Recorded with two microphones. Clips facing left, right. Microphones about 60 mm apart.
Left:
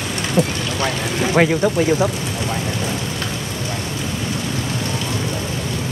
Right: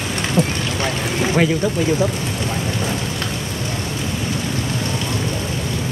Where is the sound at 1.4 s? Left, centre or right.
Left.